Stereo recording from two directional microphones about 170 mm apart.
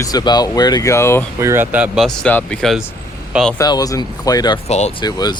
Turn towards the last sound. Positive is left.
turn(degrees=25)  # may be behind; listen again after turning